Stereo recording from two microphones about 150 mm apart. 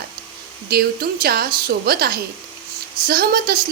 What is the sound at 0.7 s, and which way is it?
Speech, 90° right.